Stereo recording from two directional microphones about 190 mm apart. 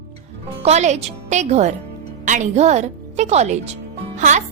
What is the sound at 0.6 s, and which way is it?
Speech, 35° right (ahead or behind).